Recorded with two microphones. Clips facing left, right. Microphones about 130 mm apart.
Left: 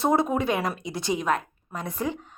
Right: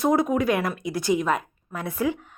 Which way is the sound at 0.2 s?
25° left (ahead or behind).